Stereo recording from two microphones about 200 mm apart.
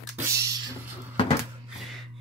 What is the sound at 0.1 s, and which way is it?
Beatboxing, 10° right (ahead or behind).